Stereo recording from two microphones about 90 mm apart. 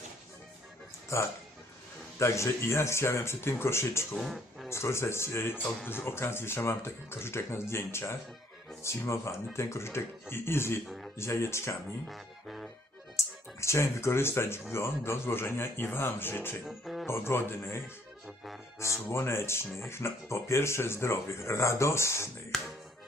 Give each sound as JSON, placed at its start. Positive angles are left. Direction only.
{"t": 1.1, "sound": "speech", "side_deg": 30}
{"t": 4.1, "sound": "speech", "side_deg": 0}
{"t": 4.7, "sound": "speech", "side_deg": 30}
{"t": 10.8, "sound": "speech", "side_deg": 0}
{"t": 11.2, "sound": "speech", "side_deg": 30}
{"t": 12.0, "sound": "music", "side_deg": 0}
{"t": 13.1, "sound": "speech", "side_deg": 30}
{"t": 16.6, "sound": "music", "side_deg": 0}
{"t": 17.1, "sound": "speech", "side_deg": 30}
{"t": 22.5, "sound": "music", "side_deg": 5}